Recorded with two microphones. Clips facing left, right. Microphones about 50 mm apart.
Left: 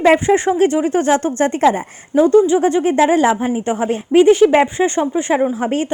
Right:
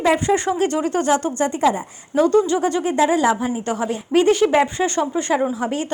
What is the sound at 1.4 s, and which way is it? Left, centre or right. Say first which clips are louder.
Speech: left 5 dB; left.